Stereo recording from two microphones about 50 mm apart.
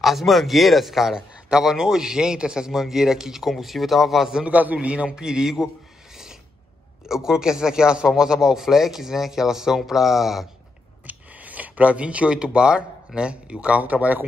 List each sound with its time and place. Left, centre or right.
0.0 s a man's voice: centre
4.5 s a man's voice: right
4.7 s a man's voice: right
7.1 s a man's voice: centre
11.1 s speech: right